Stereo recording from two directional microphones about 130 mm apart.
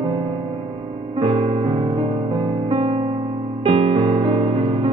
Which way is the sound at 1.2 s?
45° right (ahead or behind).